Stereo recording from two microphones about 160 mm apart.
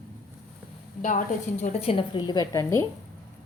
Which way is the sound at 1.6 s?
40° left (ahead or behind).